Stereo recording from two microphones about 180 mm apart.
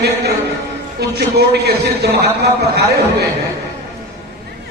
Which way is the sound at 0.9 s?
65° right (ahead or behind).